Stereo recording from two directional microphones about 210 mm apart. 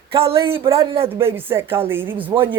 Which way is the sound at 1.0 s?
10° right (ahead or behind).